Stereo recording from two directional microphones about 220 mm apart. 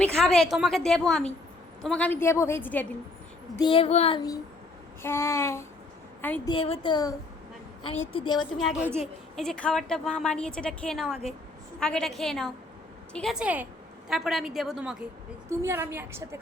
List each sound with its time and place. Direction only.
0.0 s a woman's voice: centre (ahead or behind)
3.6 s child singing: 25° left (ahead or behind)
5.0 s a woman's voice: 10° left (ahead or behind)
6.5 s child singing: 25° left (ahead or behind)
8.5 s a woman's voice: centre (ahead or behind)